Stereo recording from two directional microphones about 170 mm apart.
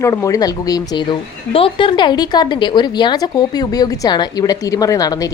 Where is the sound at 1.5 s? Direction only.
30° left (ahead or behind).